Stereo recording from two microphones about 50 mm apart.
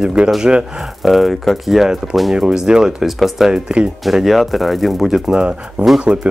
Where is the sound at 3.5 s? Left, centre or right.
Centre.